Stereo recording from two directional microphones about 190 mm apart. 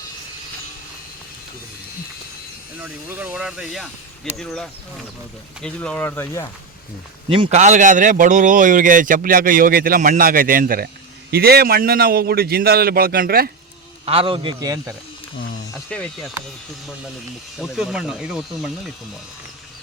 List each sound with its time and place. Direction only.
2.7 s speech: 10° right (ahead or behind); by 6.4 s 10° left (ahead or behind)
7.3 s a man's voice: 30° right (ahead or behind)
7.6 s speech: 40° right (ahead or behind)
14.0 s a man's voice: 30° right (ahead or behind)
15.9 s speech: 5° left (ahead or behind)
17.6 s speech: 5° right (ahead or behind)